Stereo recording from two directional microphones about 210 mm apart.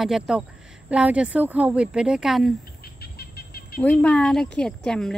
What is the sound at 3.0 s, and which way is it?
Bird, 50° left (ahead or behind).